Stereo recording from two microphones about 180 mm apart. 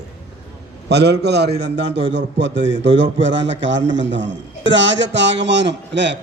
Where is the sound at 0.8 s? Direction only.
70° right (ahead or behind).